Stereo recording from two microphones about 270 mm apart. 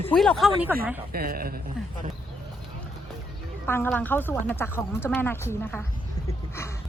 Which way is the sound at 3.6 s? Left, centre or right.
Centre.